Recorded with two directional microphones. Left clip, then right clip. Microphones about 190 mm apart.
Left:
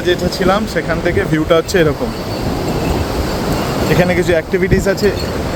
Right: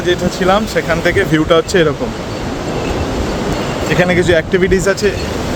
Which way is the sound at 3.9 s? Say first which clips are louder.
Right 2 dB; 5° left (ahead or behind).